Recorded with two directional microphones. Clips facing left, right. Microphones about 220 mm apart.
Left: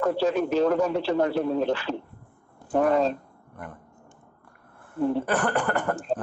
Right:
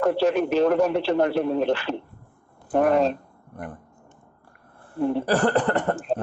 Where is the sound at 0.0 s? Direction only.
70° right (ahead or behind).